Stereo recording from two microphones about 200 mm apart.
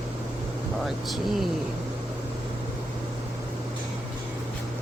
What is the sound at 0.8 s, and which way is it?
Speech, centre (ahead or behind).